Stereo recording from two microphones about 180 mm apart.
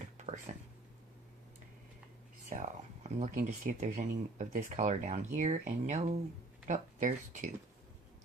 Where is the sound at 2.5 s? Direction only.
45° right (ahead or behind).